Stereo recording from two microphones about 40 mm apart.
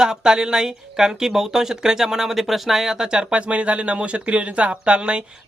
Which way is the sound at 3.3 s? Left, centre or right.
Right.